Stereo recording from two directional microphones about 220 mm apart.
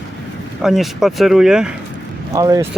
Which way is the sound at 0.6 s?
Centre (ahead or behind).